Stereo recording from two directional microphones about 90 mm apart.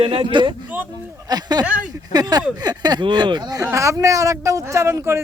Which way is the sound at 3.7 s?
35° right (ahead or behind).